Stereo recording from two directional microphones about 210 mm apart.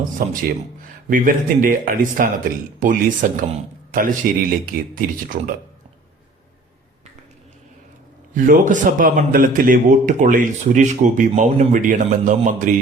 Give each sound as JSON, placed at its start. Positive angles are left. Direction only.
{"t": 0.0, "sound": "a man's voice", "side_deg": -40}
{"t": 8.3, "sound": "a man's voice", "side_deg": -40}